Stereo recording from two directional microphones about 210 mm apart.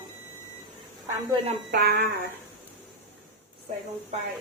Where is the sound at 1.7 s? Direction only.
50° right (ahead or behind).